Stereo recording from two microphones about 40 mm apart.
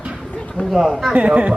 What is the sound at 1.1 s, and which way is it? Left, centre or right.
Speech, right.